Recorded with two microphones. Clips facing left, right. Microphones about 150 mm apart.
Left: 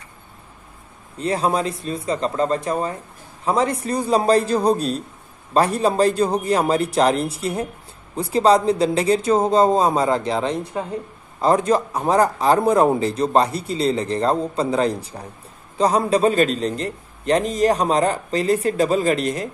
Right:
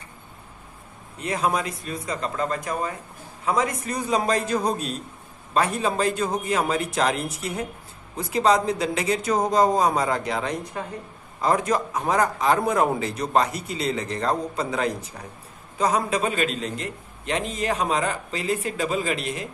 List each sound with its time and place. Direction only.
1.1 s a man's voice: 30° left (ahead or behind)